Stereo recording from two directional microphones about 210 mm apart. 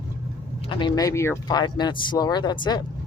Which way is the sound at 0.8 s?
20° left (ahead or behind).